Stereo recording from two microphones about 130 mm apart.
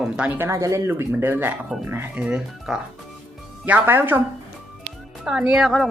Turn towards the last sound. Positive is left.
turn(degrees=0)  # may be behind; listen again after turning